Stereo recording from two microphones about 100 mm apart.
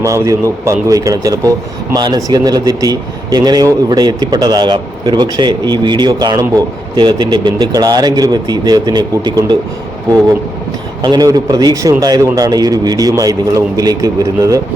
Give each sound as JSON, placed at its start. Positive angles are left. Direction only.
{"t": 0.0, "sound": "speech", "side_deg": -30}
{"t": 11.0, "sound": "speech", "side_deg": -40}